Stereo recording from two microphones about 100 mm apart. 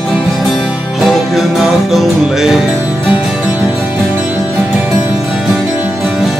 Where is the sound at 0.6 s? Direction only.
10° right (ahead or behind).